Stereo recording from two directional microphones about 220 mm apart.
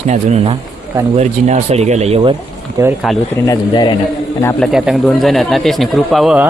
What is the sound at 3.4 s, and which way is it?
A man's voice, 20° left (ahead or behind).